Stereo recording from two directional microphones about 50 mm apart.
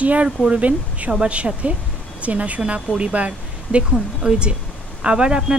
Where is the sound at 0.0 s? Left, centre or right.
Right.